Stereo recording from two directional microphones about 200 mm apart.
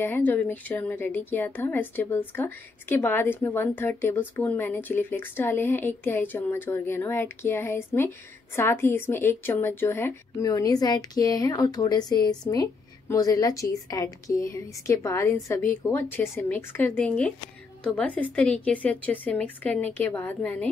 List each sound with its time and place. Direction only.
0.0 s a woman's voice: 10° left (ahead or behind)